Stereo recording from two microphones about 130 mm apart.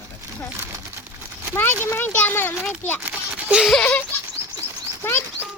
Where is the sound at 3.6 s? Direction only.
5° left (ahead or behind).